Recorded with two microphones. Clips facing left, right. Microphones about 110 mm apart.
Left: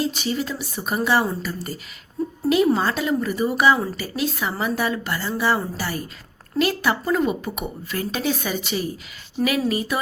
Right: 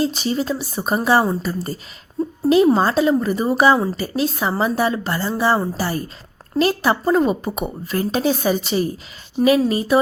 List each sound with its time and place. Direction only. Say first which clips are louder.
0.0 s a woman's voice: right 4 dB; 35° right (ahead or behind)